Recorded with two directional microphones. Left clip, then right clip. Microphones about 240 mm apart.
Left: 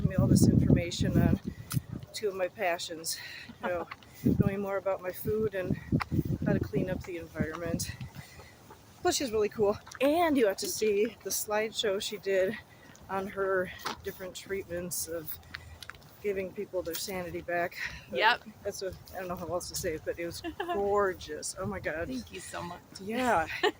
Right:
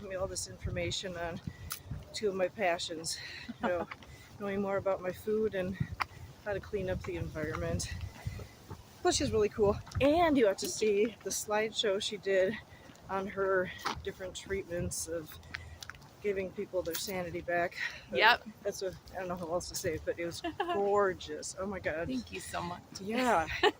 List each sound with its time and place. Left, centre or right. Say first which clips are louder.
0.1 s speech: left 9 dB; centre
9.0 s speech: left 1 dB; centre
15.8 s a sound: left 2 dB; centre
17.0 s speech: left 1 dB; centre
18.1 s speech: right 1 dB; centre
18.6 s speech: even; centre
20.4 s speech: even; centre
20.9 s speech: left 1 dB; centre
22.5 s speech: right 2 dB; centre
23.2 s speech: left 2 dB; centre